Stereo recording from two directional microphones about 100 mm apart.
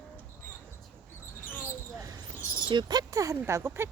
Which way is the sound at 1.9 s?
35° right (ahead or behind).